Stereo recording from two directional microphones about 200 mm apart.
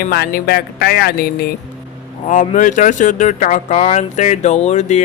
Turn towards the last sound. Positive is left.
turn(degrees=35)  # may be behind; listen again after turning